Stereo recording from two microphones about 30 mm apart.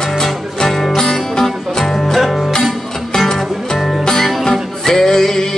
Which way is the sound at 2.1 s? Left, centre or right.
Centre.